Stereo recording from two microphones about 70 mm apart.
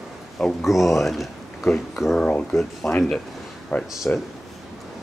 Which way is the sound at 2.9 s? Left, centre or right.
Centre.